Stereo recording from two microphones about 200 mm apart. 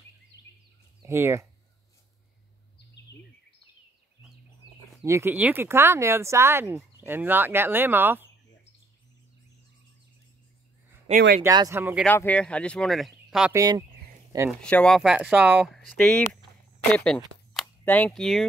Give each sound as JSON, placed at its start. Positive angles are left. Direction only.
{"t": 1.0, "sound": "speech", "side_deg": -15}
{"t": 5.0, "sound": "speech", "side_deg": -10}
{"t": 11.1, "sound": "speech", "side_deg": -40}
{"t": 11.4, "sound": "speech", "side_deg": -15}
{"t": 12.0, "sound": "speech", "side_deg": 10}
{"t": 13.5, "sound": "speech", "side_deg": -20}
{"t": 14.6, "sound": "speech", "side_deg": 5}
{"t": 17.6, "sound": "a sound", "side_deg": 10}